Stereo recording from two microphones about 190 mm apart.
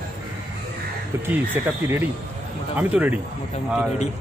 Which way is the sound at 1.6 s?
15° right (ahead or behind).